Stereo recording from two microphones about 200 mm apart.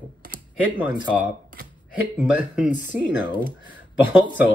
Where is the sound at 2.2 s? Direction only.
5° right (ahead or behind).